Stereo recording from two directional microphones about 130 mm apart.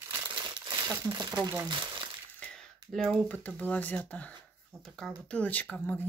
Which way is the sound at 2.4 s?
5° left (ahead or behind).